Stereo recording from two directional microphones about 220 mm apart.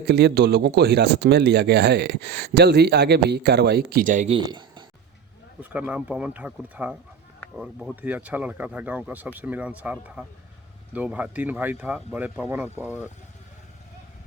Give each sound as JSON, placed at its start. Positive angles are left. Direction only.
{"t": 0.1, "sound": "speech", "side_deg": -50}
{"t": 4.4, "sound": "speech", "side_deg": -20}
{"t": 5.7, "sound": "speech", "side_deg": -5}